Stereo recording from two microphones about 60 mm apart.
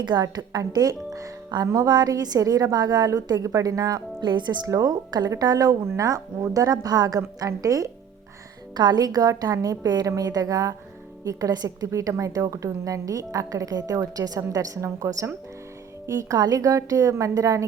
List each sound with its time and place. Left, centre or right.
0.3 s a woman's voice: right
6.0 s a woman's voice: right
7.3 s a woman's voice: right
9.0 s a woman's voice: right